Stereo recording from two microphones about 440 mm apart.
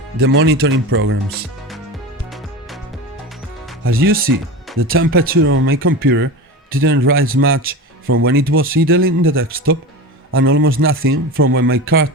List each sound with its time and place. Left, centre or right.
0.2 s speech: right
3.8 s speech: centre